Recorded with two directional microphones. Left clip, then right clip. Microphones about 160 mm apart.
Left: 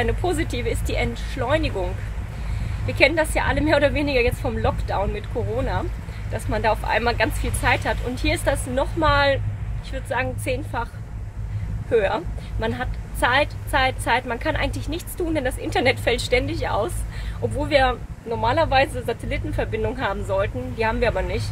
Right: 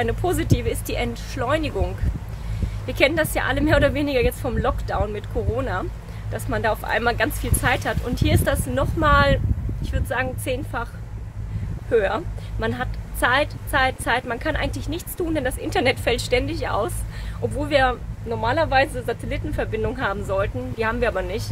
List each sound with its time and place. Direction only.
0.0 s a woman's voice: 15° right (ahead or behind)
2.9 s a woman's voice: 15° right (ahead or behind)
11.9 s a woman's voice: 15° right (ahead or behind)